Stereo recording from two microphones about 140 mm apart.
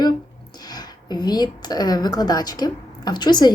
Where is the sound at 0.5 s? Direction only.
30° left (ahead or behind).